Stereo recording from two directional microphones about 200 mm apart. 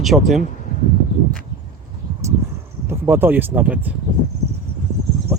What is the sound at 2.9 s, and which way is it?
Speech, 10° right (ahead or behind).